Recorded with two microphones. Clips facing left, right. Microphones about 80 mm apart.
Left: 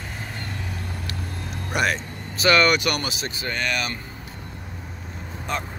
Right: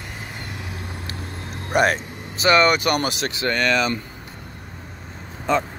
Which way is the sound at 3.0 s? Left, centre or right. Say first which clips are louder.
Right 6 dB; right.